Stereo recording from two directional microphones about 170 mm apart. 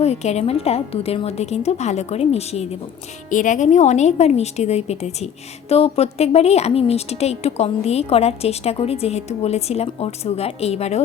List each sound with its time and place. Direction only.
0.0 s a woman's voice: 40° left (ahead or behind)
3.2 s a woman's voice: 50° left (ahead or behind)